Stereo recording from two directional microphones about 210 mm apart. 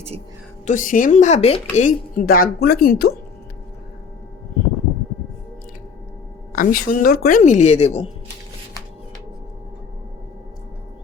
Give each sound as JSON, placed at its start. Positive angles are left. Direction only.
{"t": 0.6, "sound": "a woman's voice", "side_deg": 35}
{"t": 6.6, "sound": "a woman's voice", "side_deg": 45}